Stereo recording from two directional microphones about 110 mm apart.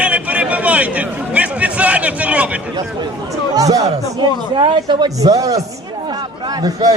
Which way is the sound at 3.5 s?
30° right (ahead or behind).